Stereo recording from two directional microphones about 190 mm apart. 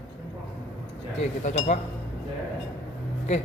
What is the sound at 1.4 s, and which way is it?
Speech, 40° left (ahead or behind).